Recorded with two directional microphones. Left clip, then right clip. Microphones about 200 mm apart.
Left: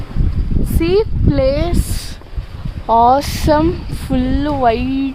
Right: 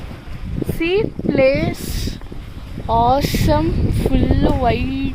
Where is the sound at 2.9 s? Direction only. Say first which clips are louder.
Left 4 dB; 15° left (ahead or behind).